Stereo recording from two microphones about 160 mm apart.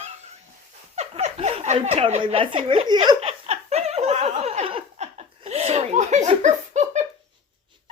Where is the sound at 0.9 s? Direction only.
40° right (ahead or behind).